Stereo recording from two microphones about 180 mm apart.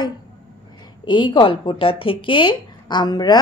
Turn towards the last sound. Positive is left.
turn(degrees=25)  # may be behind; listen again after turning